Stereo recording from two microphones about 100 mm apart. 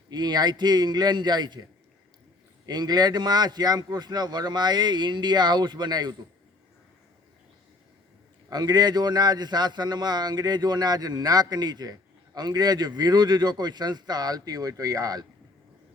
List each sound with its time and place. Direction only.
0.1 s a man's voice: 45° right (ahead or behind)
2.6 s a man's voice: 45° right (ahead or behind)
8.4 s a man's voice: 40° right (ahead or behind)